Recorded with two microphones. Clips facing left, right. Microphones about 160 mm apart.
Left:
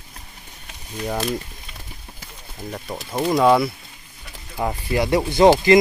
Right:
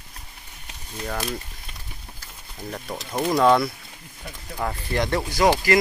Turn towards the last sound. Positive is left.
turn(degrees=25)  # may be behind; listen again after turning